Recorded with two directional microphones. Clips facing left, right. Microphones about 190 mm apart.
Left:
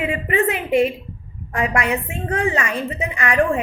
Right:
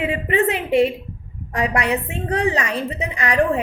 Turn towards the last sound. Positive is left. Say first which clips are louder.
# even
turn(degrees=-35)  # may be behind; listen again after turning